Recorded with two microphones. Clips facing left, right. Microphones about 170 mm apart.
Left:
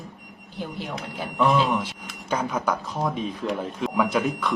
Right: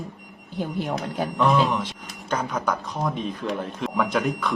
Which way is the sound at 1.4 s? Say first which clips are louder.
Even; 10° left (ahead or behind).